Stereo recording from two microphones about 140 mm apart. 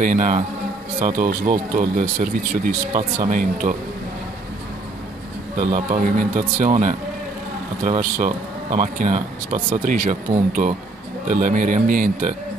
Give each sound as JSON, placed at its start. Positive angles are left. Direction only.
{"t": 0.0, "sound": "speech", "side_deg": -65}
{"t": 5.6, "sound": "speech", "side_deg": -60}